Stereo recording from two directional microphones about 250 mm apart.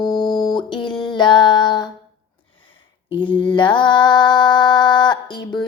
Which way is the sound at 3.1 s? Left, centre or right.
Centre.